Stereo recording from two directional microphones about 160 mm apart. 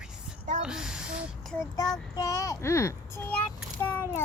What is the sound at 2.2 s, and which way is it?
A child's voice, 20° left (ahead or behind).